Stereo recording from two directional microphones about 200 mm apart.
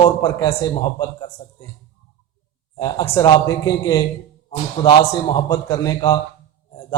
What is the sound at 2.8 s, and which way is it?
A man's voice, 20° left (ahead or behind).